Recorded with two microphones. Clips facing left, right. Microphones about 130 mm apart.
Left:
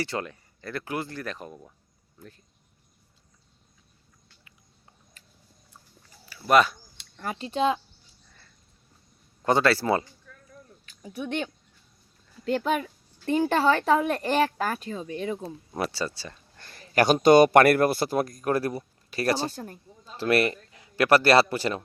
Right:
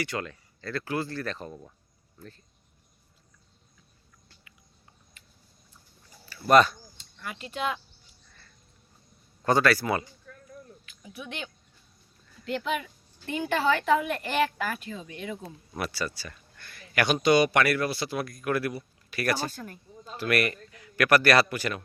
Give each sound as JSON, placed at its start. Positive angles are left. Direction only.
{"t": 0.0, "sound": "speech", "side_deg": 30}
{"t": 6.2, "sound": "a sound", "side_deg": 10}
{"t": 7.2, "sound": "speech", "side_deg": 35}
{"t": 9.4, "sound": "speech", "side_deg": 25}
{"t": 12.5, "sound": "a child's voice", "side_deg": 40}
{"t": 17.2, "sound": "a child's voice", "side_deg": 50}